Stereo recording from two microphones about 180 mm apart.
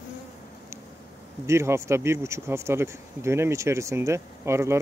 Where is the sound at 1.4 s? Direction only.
15° right (ahead or behind).